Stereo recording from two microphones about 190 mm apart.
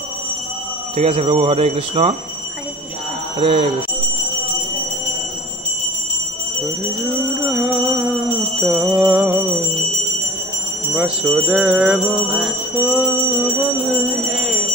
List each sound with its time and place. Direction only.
0.9 s speech: 30° right (ahead or behind)
3.3 s speech: 30° right (ahead or behind)
7.4 s bell: 5° right (ahead or behind)
11.0 s jingle bell: 5° right (ahead or behind)